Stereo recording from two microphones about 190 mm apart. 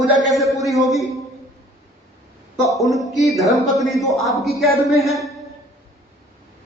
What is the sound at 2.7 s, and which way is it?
A woman's voice, centre (ahead or behind).